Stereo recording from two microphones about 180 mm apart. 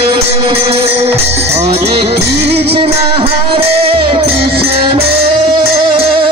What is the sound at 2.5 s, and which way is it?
Music, 35° right (ahead or behind).